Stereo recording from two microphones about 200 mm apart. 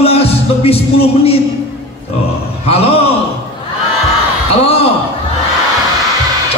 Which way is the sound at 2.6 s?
30° left (ahead or behind).